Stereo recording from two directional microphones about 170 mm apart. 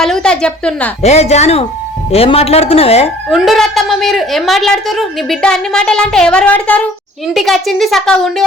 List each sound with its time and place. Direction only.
0.0 s a woman's voice: 5° left (ahead or behind)
1.0 s a woman's voice: 40° left (ahead or behind)
3.2 s a woman's voice: centre (ahead or behind)